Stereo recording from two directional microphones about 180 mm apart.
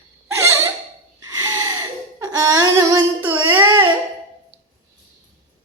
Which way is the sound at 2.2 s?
15° right (ahead or behind).